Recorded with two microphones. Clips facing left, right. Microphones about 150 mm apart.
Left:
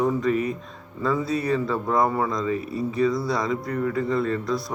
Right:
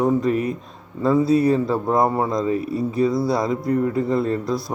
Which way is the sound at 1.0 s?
30° right (ahead or behind).